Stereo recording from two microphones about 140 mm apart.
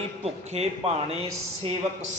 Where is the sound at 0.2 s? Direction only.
50° right (ahead or behind).